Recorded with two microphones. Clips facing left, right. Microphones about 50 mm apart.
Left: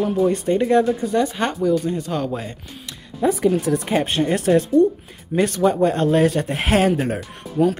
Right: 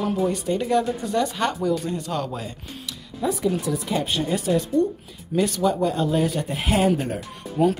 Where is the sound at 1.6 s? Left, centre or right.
Centre.